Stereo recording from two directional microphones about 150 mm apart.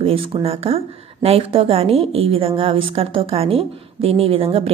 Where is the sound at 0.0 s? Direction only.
40° right (ahead or behind).